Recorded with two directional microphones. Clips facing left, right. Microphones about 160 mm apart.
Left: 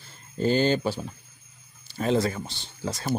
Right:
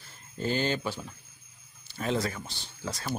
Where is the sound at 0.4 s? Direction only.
35° left (ahead or behind).